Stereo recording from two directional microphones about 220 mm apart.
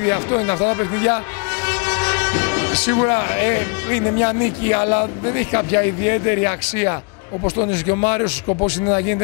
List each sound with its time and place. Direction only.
0.0 s speech: 15° left (ahead or behind)
1.7 s vehicle: 10° left (ahead or behind)
3.0 s speech: 20° left (ahead or behind)